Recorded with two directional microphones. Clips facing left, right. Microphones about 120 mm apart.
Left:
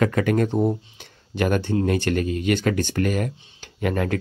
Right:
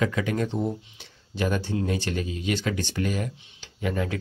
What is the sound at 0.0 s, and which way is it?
Speech, 55° left (ahead or behind).